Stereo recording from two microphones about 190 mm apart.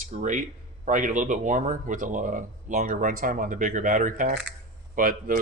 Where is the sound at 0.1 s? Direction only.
40° right (ahead or behind).